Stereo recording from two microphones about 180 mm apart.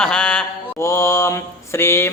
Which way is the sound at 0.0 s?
5° left (ahead or behind).